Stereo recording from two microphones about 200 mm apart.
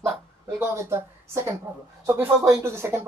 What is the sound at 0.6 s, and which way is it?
Speech, 10° right (ahead or behind).